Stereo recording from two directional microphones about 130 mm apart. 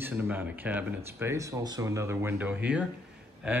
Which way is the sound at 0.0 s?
15° right (ahead or behind).